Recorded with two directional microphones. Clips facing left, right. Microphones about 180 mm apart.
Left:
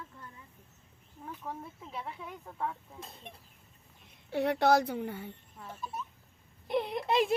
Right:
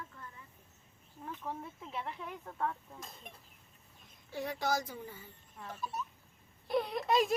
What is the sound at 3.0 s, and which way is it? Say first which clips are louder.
Speech: left 3 dB; 30° left (ahead or behind).